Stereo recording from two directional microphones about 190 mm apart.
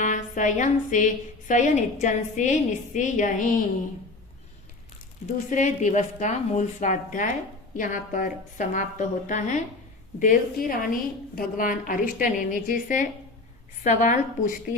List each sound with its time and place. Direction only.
0.0 s a woman's voice: 40° left (ahead or behind)
5.5 s a woman's voice: 40° left (ahead or behind)